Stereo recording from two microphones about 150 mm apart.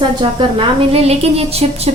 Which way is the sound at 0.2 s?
35° right (ahead or behind).